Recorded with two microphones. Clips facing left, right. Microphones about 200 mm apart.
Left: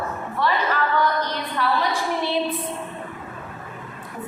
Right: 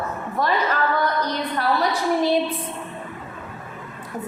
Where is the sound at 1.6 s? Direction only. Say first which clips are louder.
Even; 40° right (ahead or behind).